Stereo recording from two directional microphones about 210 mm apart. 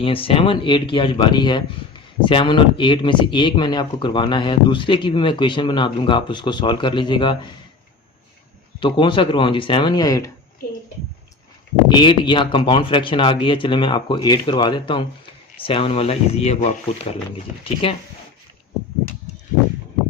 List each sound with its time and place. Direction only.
0.0 s speech: 25° left (ahead or behind)
8.8 s speech: 25° left (ahead or behind)
11.9 s speech: 20° left (ahead or behind)